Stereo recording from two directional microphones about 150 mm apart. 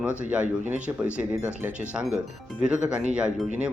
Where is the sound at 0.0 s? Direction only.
10° right (ahead or behind).